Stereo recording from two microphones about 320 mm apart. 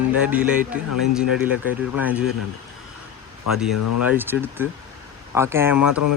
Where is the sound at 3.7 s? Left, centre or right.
Left.